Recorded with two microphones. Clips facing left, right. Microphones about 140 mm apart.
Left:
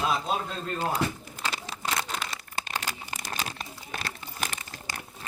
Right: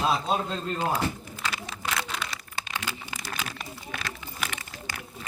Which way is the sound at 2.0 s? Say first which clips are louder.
Even; 40° left (ahead or behind).